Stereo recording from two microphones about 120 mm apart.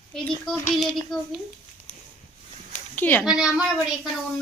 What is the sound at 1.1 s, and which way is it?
Speech, 5° left (ahead or behind).